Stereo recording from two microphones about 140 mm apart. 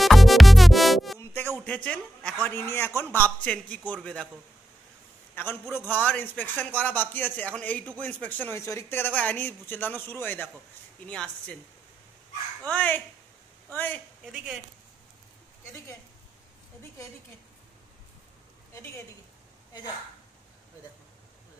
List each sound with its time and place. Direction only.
0.0 s music: centre (ahead or behind)
1.9 s speech: 10° left (ahead or behind)
5.3 s a man's voice: 15° left (ahead or behind)
12.6 s speech: 10° left (ahead or behind)
14.2 s speech: 5° right (ahead or behind)